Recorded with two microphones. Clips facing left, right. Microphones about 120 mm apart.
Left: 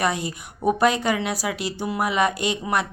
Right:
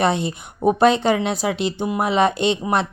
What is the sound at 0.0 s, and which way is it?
Speech, 25° right (ahead or behind).